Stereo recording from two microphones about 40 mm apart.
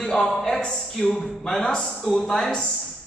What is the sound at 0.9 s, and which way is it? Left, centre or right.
Speech, centre.